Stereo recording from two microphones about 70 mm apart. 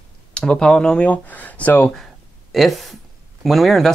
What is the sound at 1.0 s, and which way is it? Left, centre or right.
Speech, left.